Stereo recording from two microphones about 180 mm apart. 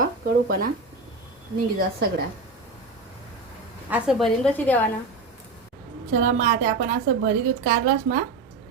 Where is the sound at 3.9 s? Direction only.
Centre (ahead or behind).